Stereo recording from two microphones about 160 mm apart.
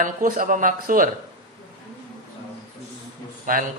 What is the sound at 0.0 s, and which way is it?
Speech, 55° right (ahead or behind).